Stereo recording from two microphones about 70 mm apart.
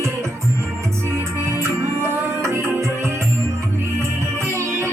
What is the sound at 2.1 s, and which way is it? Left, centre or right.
Music, right.